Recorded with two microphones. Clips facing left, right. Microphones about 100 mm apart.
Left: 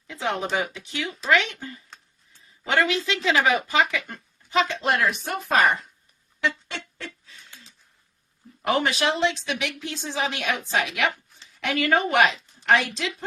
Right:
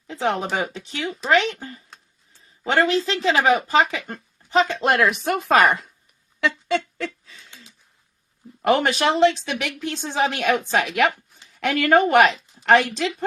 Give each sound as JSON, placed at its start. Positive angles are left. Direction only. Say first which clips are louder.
{"t": 0.1, "sound": "speech", "louder": "right 3 dB", "side_deg": -40}
{"t": 4.8, "sound": "speech", "louder": "right 4 dB", "side_deg": -65}
{"t": 8.6, "sound": "a woman's voice", "louder": "right 4 dB", "side_deg": -55}